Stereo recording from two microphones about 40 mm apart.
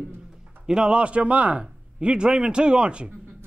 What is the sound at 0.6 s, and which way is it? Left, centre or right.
Speech, right.